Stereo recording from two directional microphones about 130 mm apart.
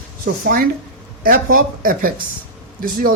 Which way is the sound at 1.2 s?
90° right.